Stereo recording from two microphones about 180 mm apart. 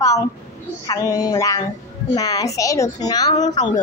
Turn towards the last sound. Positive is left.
turn(degrees=20)  # may be behind; listen again after turning